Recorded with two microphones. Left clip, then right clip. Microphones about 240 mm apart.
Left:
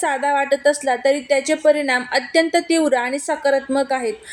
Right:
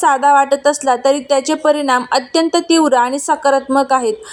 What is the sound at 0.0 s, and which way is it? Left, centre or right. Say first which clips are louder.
A woman's voice: right 8 dB; centre.